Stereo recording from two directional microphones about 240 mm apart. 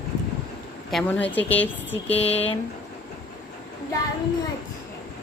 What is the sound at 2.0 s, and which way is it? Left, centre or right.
Speech, left.